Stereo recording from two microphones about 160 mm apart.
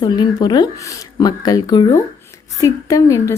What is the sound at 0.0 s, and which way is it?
Speech, 25° left (ahead or behind).